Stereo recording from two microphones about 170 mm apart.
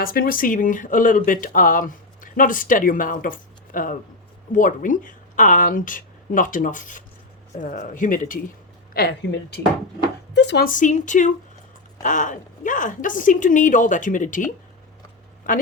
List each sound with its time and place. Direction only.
0.0 s speech: 60° left (ahead or behind)
8.9 s a woman's voice: 70° left (ahead or behind)
10.3 s speech: 90° left
10.7 s speech: 45° left (ahead or behind)